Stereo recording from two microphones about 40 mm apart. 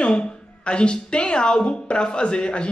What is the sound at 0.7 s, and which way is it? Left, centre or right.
Speech, left.